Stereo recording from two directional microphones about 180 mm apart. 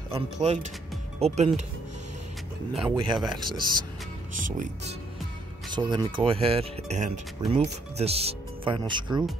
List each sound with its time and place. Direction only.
0.1 s speech: 35° right (ahead or behind)
2.8 s speech: 25° right (ahead or behind)
4.3 s speech: 45° right (ahead or behind)
5.7 s speech: 25° right (ahead or behind)